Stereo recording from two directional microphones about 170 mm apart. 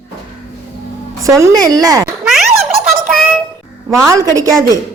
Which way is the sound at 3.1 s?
Centre (ahead or behind).